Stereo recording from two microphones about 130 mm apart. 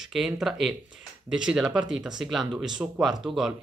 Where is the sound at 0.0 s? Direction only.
Centre (ahead or behind).